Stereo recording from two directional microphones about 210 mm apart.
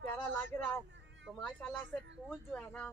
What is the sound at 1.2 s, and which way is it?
Speech, centre (ahead or behind).